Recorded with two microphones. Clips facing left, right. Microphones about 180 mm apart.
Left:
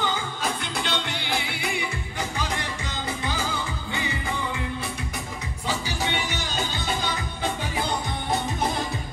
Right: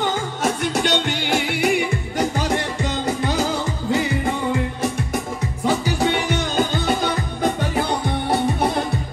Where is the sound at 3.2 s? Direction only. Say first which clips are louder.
Right 7 dB; 75° right (ahead or behind).